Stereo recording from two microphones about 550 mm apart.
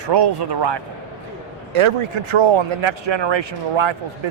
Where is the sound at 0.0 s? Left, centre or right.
Right.